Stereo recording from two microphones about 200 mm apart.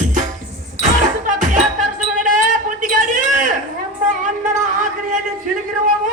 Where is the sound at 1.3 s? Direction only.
40° right (ahead or behind).